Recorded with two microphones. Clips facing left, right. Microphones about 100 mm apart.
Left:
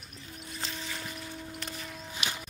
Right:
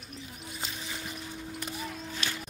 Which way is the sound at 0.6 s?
10° right (ahead or behind).